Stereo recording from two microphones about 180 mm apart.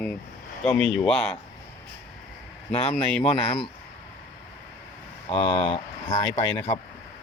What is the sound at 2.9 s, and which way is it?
Speech, 5° left (ahead or behind).